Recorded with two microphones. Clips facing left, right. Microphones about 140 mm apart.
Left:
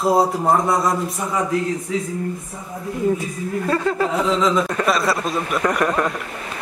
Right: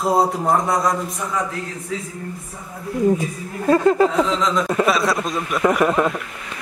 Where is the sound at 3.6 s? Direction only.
15° right (ahead or behind).